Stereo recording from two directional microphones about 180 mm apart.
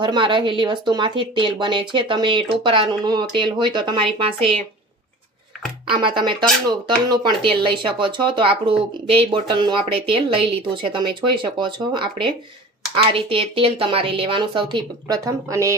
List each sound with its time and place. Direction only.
0.0 s speech: 25° right (ahead or behind)
5.9 s speech: 30° right (ahead or behind)